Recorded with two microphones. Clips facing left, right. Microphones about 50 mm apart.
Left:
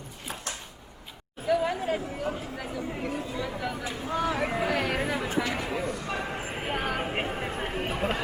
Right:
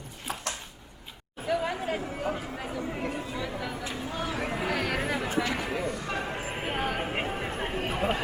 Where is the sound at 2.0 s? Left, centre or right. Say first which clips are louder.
Even; centre.